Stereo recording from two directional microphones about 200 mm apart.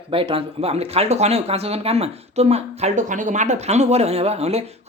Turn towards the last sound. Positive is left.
turn(degrees=-30)  # may be behind; listen again after turning